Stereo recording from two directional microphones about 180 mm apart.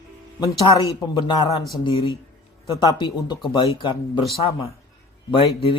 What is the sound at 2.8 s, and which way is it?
Speech, 25° left (ahead or behind).